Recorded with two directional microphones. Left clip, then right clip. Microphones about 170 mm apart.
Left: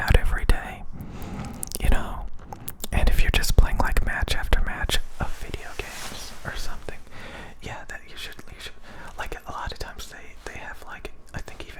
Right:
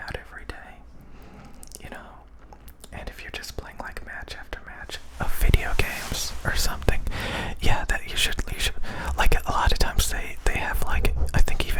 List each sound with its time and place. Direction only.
0.0 s whispering: 45° left (ahead or behind)
5.4 s whispering: 20° right (ahead or behind)